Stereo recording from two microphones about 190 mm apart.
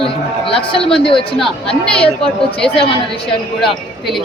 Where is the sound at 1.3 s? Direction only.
Centre (ahead or behind).